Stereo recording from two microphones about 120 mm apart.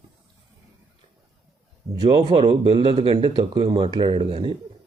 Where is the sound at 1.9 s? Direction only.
35° right (ahead or behind).